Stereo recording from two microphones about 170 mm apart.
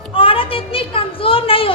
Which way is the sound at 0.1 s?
30° left (ahead or behind).